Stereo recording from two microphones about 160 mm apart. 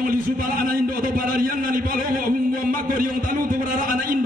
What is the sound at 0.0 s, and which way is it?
A man's voice, 60° right (ahead or behind).